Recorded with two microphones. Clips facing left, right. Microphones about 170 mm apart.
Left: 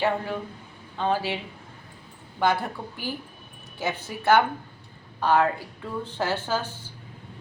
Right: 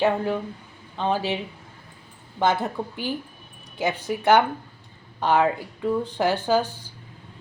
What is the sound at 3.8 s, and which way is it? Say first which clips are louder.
A woman's voice: right 5 dB; 15° right (ahead or behind).